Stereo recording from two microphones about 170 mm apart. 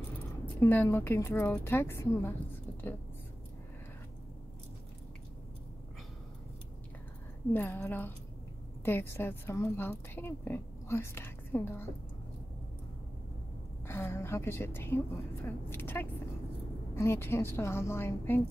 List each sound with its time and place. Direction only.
0.6 s a woman's voice: 15° left (ahead or behind)
7.5 s a woman's voice: 10° left (ahead or behind)
13.8 s a woman's voice: 15° left (ahead or behind)